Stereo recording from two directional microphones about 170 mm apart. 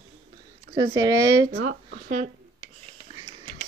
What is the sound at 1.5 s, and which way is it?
Speech, 80° right.